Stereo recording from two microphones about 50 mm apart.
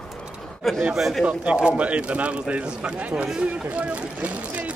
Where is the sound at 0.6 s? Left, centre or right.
Centre.